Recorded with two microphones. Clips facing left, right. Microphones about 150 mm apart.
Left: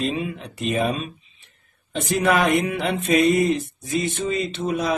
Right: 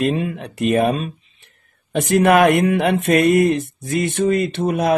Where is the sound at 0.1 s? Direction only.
55° right (ahead or behind).